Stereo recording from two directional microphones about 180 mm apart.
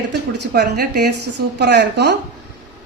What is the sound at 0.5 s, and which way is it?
A woman's voice, 65° right (ahead or behind).